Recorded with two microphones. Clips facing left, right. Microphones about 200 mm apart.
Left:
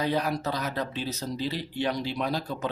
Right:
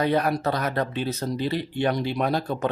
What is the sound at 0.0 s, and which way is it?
Speech, 60° right (ahead or behind).